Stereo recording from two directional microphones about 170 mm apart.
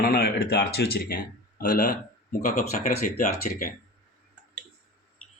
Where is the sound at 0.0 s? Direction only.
60° left (ahead or behind).